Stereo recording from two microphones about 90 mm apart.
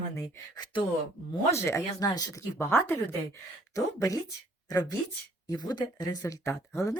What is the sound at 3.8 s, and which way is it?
Speech, 40° left (ahead or behind).